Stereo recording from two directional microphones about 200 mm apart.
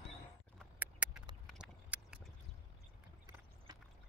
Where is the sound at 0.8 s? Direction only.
10° right (ahead or behind).